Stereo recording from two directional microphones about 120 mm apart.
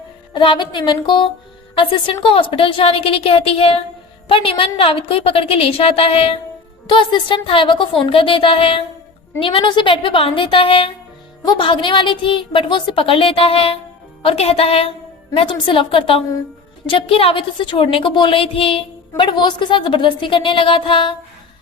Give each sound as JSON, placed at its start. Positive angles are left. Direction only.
{"t": 0.3, "sound": "a woman's voice", "side_deg": 40}
{"t": 6.8, "sound": "a woman's voice", "side_deg": 40}
{"t": 15.4, "sound": "a woman's voice", "side_deg": 45}